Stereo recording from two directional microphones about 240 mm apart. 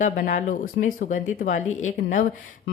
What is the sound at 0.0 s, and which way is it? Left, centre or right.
Speech, left.